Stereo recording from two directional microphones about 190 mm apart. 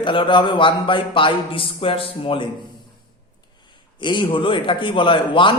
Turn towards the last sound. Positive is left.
turn(degrees=25)  # may be behind; listen again after turning